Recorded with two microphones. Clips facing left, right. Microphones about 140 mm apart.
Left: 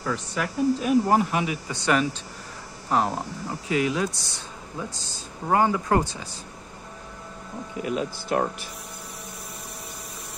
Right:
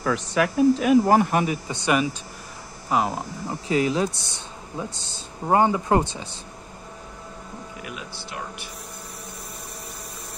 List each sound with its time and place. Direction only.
0.0 s speech: 70° right (ahead or behind)
1.3 s a man's voice: 45° right (ahead or behind)
1.7 s speech: 15° right (ahead or behind)
2.9 s speech: 5° right (ahead or behind)
3.4 s speech: 30° right (ahead or behind)
7.8 s speech: 35° left (ahead or behind)